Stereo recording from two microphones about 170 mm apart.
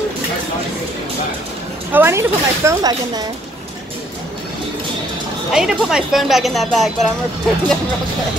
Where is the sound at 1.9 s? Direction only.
15° right (ahead or behind).